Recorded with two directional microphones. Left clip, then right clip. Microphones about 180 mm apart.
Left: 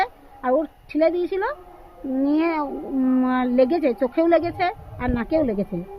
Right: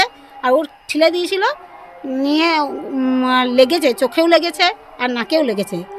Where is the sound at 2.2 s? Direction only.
45° right (ahead or behind).